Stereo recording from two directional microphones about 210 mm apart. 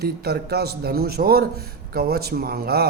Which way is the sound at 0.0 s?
50° right (ahead or behind).